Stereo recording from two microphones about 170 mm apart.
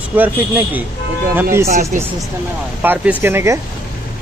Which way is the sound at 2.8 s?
10° right (ahead or behind).